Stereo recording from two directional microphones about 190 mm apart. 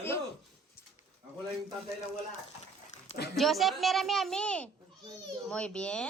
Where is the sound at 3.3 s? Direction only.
Centre (ahead or behind).